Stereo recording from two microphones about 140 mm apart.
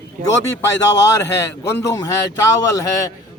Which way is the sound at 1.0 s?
20° left (ahead or behind).